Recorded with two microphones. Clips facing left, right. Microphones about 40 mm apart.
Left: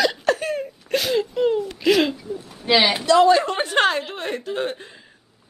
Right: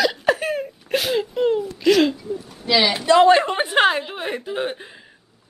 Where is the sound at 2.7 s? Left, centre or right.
Left.